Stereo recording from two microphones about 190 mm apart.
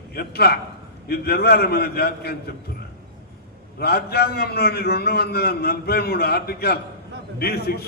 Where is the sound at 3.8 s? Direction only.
55° left (ahead or behind).